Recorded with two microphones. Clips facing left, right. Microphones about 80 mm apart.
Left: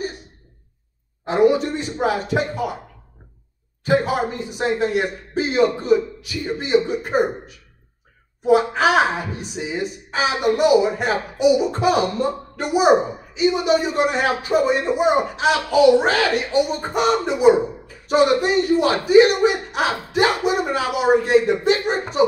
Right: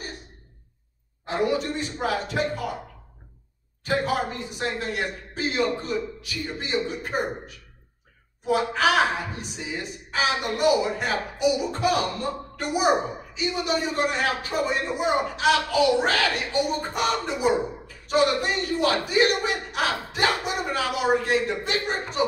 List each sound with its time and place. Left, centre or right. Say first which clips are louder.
1.2 s speech: left 8 dB; left
3.8 s speech: left 6 dB; centre